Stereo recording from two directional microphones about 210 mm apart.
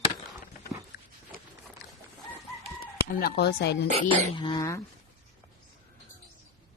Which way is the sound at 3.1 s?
50° left (ahead or behind).